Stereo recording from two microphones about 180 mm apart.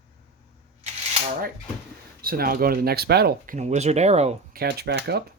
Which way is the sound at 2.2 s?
55° right (ahead or behind).